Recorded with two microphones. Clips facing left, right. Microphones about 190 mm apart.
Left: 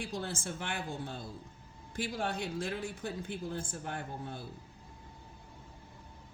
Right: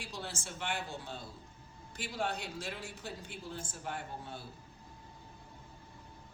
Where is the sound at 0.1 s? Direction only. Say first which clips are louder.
Left 5 dB; 55° left (ahead or behind).